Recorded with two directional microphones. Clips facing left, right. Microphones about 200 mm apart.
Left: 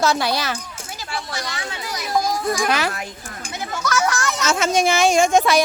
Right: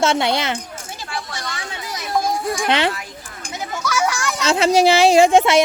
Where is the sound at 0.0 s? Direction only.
25° right (ahead or behind).